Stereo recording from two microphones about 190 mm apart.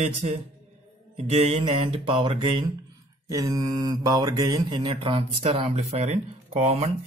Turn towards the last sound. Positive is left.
turn(degrees=-35)  # may be behind; listen again after turning